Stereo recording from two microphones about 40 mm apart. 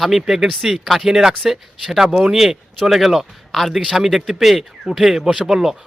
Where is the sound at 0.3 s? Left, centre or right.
Centre.